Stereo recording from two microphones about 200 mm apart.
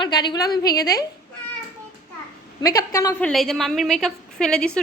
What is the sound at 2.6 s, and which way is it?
A woman's voice, 15° left (ahead or behind).